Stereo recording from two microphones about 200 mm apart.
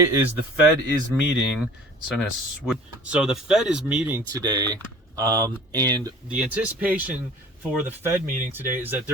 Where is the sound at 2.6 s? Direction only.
5° right (ahead or behind).